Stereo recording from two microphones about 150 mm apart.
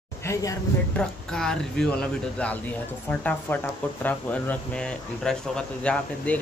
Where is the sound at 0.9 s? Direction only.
5° left (ahead or behind).